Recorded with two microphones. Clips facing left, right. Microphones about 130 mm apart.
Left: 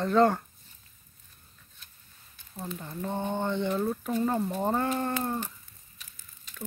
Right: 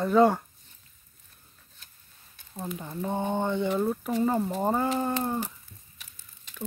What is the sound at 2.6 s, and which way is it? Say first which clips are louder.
Speech: right 2 dB; 15° right (ahead or behind).